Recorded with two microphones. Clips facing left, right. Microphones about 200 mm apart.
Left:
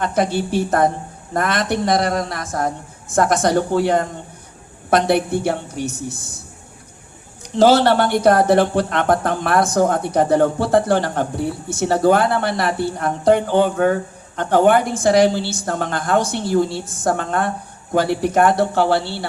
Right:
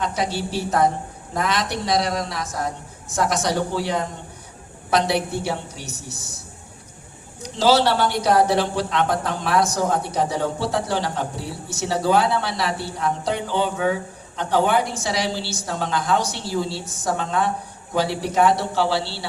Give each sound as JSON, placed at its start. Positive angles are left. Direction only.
{"t": 0.0, "sound": "speech", "side_deg": 55}
{"t": 7.4, "sound": "speech", "side_deg": 55}